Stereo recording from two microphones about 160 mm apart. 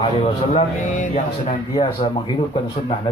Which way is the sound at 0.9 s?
45° left (ahead or behind).